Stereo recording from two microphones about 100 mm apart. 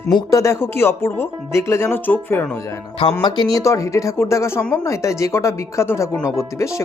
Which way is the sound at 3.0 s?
70° left (ahead or behind).